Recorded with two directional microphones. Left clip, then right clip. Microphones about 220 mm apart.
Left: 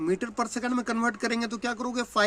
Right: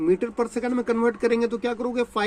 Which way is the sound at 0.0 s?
20° left (ahead or behind).